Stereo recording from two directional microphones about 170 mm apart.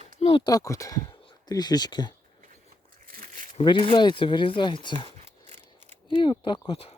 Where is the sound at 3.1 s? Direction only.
55° right (ahead or behind).